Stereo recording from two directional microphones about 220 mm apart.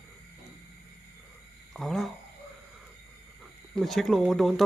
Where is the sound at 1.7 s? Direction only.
Centre (ahead or behind).